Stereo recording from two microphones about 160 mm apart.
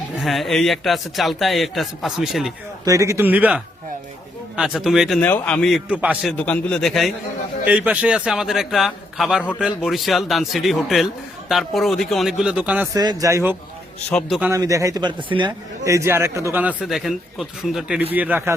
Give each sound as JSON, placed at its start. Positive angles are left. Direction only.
{"t": 0.2, "sound": "a man's voice", "side_deg": 0}
{"t": 2.8, "sound": "a man's voice", "side_deg": -20}
{"t": 5.9, "sound": "a man's voice", "side_deg": -10}
{"t": 6.2, "sound": "a man's voice", "side_deg": 5}
{"t": 12.9, "sound": "speech", "side_deg": -25}
{"t": 14.1, "sound": "a man's voice", "side_deg": 5}
{"t": 14.5, "sound": "speech", "side_deg": -20}
{"t": 15.8, "sound": "a man's voice", "side_deg": -20}